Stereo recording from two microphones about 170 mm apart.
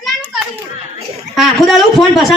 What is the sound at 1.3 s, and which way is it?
A woman's voice, centre (ahead or behind).